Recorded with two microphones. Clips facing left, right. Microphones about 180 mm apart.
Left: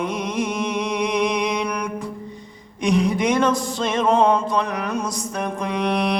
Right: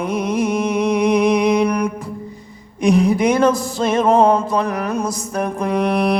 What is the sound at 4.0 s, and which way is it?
Music, 45° right (ahead or behind).